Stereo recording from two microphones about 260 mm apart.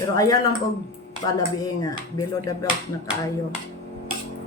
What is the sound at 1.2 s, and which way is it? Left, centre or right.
Speech, centre.